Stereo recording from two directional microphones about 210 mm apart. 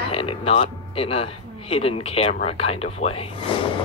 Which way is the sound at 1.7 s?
25° left (ahead or behind).